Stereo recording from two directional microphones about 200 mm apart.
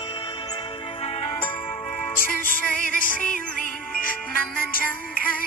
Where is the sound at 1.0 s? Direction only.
30° left (ahead or behind).